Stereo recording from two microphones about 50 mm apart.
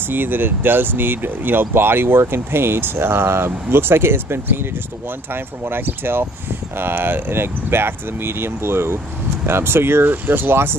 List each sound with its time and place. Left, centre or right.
0.1 s speech: right